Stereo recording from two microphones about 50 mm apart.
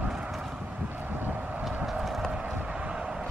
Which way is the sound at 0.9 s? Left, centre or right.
Right.